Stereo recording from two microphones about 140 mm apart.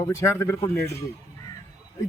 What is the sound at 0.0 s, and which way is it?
Speech, 20° left (ahead or behind).